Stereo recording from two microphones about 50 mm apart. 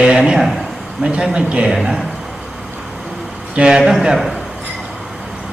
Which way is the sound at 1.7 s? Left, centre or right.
Centre.